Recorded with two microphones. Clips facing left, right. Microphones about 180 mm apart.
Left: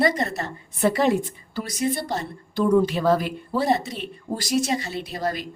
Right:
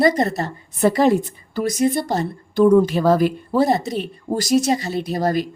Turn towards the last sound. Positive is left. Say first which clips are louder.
# right 7 dB
turn(degrees=-40)  # may be behind; listen again after turning